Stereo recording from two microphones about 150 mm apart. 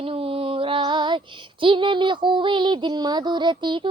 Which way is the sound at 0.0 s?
40° right (ahead or behind).